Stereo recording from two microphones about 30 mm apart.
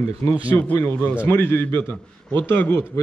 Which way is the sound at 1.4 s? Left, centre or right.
Left.